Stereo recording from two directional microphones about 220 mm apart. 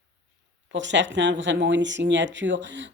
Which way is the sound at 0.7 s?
55° right (ahead or behind).